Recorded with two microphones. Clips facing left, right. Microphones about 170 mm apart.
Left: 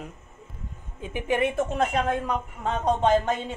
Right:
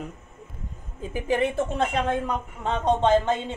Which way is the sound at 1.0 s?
35° right (ahead or behind).